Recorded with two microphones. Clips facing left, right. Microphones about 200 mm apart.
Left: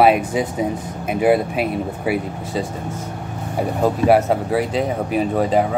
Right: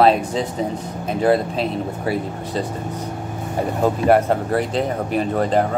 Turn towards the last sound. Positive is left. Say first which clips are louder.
# left 1 dB
turn(degrees=5)  # may be behind; listen again after turning